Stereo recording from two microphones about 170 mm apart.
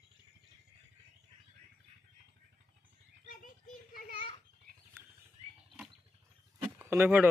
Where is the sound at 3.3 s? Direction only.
55° left (ahead or behind).